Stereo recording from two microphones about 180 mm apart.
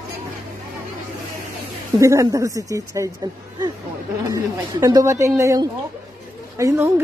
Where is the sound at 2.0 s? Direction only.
15° right (ahead or behind).